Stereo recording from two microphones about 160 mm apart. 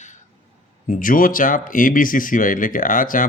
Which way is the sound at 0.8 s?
55° left (ahead or behind).